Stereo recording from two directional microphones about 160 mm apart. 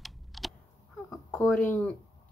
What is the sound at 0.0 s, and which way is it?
Typing, centre (ahead or behind).